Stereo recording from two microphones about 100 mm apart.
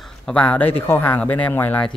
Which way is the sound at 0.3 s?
15° left (ahead or behind).